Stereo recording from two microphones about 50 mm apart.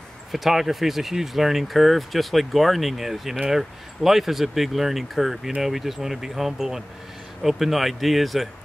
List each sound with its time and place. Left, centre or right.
0.3 s speech: centre